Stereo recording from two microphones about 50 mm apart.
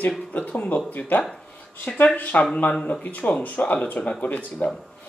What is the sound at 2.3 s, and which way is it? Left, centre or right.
Speech, left.